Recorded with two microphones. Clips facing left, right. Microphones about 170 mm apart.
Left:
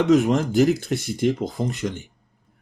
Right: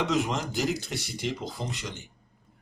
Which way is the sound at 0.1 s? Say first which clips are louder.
Left 10 dB; 45° left (ahead or behind).